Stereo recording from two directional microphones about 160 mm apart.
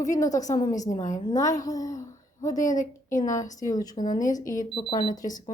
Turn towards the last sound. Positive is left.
turn(degrees=25)  # may be behind; listen again after turning